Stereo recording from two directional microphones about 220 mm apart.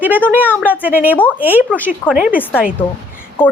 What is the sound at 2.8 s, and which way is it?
Speech, 20° left (ahead or behind).